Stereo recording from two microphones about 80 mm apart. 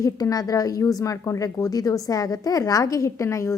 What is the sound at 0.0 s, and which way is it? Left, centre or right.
A woman's voice, left.